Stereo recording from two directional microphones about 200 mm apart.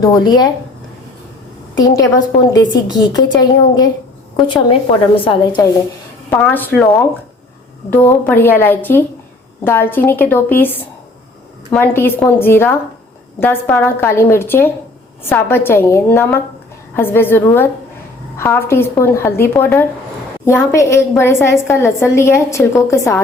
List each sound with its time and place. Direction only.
0.0 s a woman's voice: 20° left (ahead or behind)
1.8 s a woman's voice: 20° left (ahead or behind)
4.4 s a woman's voice: 25° left (ahead or behind)
6.3 s a woman's voice: 10° left (ahead or behind)
11.7 s a woman's voice: 10° left (ahead or behind)